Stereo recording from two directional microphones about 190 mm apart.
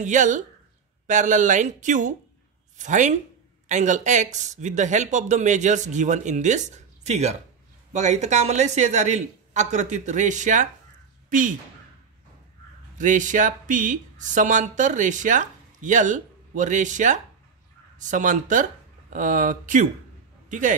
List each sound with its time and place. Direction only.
0.0 s speech: 40° right (ahead or behind)
12.9 s a man's voice: 40° right (ahead or behind)